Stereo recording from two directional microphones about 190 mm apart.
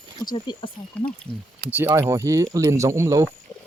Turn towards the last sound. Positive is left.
turn(degrees=-15)  # may be behind; listen again after turning